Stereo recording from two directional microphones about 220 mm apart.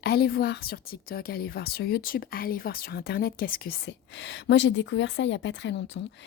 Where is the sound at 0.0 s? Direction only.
45° left (ahead or behind).